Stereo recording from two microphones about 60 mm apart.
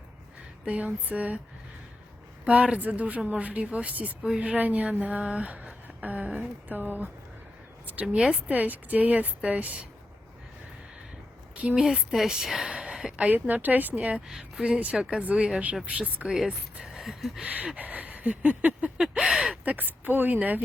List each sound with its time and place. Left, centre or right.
0.6 s speech: centre
2.4 s speech: centre
8.0 s speech: centre
11.7 s speech: centre
12.7 s a sound: centre
13.2 s speech: right
14.3 s speech: centre
16.8 s a sound: centre
17.7 s speech: right
18.9 s speech: centre
19.6 s speech: right